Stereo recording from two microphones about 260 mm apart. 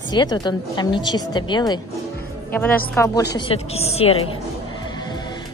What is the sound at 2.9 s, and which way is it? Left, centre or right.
Speech, centre.